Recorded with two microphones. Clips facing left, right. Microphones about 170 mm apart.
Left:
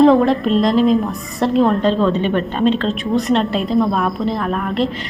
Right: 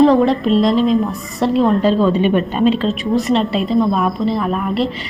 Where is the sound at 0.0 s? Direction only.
Centre (ahead or behind).